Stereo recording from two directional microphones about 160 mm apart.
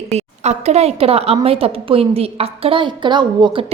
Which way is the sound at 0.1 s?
45° right (ahead or behind).